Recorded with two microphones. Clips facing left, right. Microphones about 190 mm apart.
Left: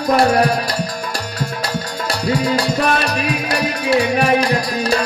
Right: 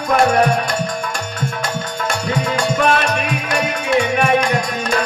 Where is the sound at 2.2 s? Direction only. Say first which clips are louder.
Left 3 dB; 35° left (ahead or behind).